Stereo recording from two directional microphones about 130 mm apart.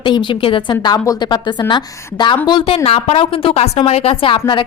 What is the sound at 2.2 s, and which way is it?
Speech, 35° left (ahead or behind).